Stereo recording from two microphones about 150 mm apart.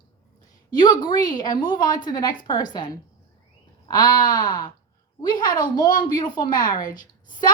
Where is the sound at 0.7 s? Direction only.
30° left (ahead or behind).